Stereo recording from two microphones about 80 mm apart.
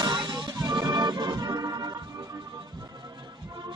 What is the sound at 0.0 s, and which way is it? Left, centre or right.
Music, right.